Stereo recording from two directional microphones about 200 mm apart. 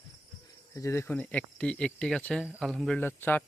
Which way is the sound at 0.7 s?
15° left (ahead or behind).